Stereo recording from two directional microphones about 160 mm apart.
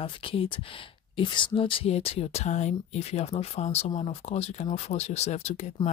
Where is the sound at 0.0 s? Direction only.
35° left (ahead or behind).